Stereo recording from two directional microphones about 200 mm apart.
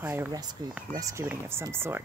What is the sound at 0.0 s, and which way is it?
Speech, 10° right (ahead or behind).